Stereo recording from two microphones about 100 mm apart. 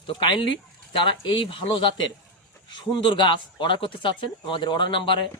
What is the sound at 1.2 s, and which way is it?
Speech, 60° left (ahead or behind).